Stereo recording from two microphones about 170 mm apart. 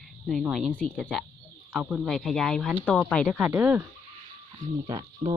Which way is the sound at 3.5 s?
10° right (ahead or behind).